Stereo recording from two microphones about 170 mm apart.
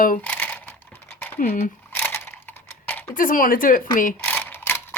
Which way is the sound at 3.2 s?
55° left (ahead or behind).